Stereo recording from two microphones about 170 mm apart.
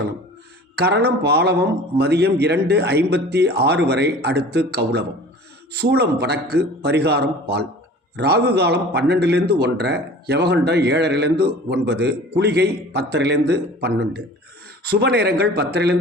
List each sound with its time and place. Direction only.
0.8 s a man's voice: 70° right (ahead or behind); by 13.4 s 85° right
13.5 s a man's voice: 70° right (ahead or behind)